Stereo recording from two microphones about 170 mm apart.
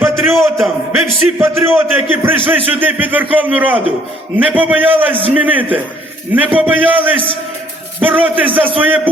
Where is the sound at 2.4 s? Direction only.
35° right (ahead or behind).